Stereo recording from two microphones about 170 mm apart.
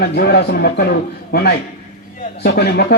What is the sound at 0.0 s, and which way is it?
A man's voice, 70° left (ahead or behind).